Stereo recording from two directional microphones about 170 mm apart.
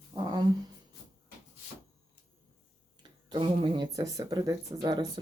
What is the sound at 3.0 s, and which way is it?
Speech, 25° right (ahead or behind).